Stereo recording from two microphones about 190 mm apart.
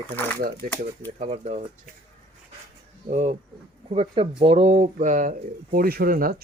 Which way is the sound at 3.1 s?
35° right (ahead or behind).